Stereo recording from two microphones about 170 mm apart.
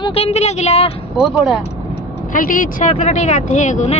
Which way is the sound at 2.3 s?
55° left (ahead or behind).